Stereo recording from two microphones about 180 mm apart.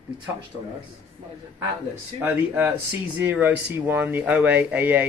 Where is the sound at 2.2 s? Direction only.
10° right (ahead or behind).